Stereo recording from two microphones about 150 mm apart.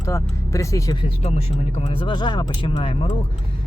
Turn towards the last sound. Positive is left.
turn(degrees=35)  # may be behind; listen again after turning